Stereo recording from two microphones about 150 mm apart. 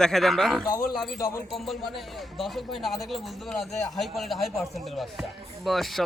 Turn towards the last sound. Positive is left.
turn(degrees=0)  # may be behind; listen again after turning